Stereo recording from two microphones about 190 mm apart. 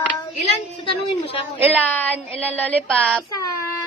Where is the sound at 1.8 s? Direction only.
10° left (ahead or behind).